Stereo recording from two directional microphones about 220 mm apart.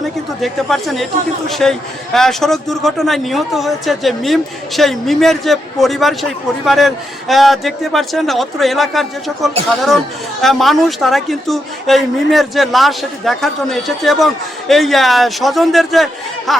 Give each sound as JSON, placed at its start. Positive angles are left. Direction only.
{"t": 0.4, "sound": "speech", "side_deg": 0}